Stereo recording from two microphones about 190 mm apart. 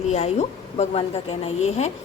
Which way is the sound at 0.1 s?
35° left (ahead or behind).